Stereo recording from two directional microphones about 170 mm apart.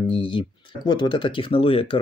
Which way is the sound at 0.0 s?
30° left (ahead or behind).